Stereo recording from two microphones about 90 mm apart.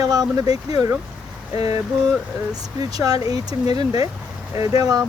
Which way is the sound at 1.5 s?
90° left.